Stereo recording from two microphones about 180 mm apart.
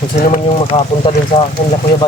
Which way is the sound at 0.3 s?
30° left (ahead or behind).